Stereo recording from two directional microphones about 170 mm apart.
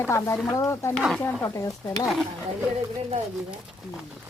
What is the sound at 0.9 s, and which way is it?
Speech, 5° left (ahead or behind).